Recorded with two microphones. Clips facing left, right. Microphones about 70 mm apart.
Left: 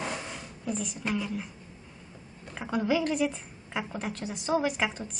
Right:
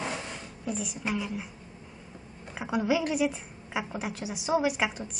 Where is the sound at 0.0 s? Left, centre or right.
Centre.